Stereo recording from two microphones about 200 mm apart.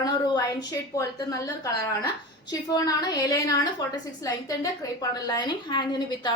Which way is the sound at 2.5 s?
20° left (ahead or behind).